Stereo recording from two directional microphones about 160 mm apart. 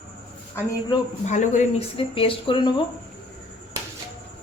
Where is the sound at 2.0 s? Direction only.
35° left (ahead or behind).